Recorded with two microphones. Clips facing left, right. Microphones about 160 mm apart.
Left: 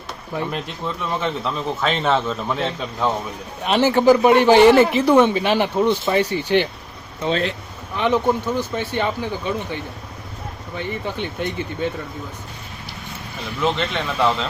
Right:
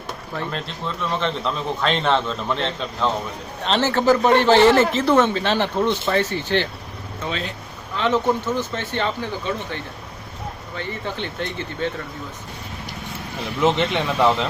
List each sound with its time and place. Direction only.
0.3 s speech: 15° left (ahead or behind)
1.2 s a man's voice: 5° left (ahead or behind)
7.9 s speech: 15° left (ahead or behind)
13.6 s speech: 15° right (ahead or behind)